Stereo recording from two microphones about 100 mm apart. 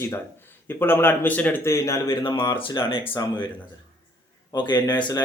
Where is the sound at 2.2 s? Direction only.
50° left (ahead or behind).